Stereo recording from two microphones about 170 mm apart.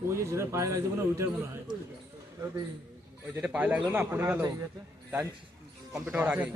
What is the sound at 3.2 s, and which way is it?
A man's voice, 10° right (ahead or behind).